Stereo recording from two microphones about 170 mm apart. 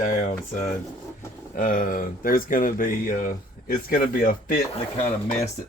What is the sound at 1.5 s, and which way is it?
Speech, 55° left (ahead or behind).